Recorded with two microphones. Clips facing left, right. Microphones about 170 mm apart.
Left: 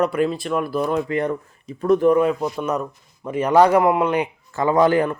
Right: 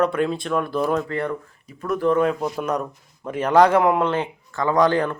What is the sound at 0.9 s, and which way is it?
Speech, 15° left (ahead or behind).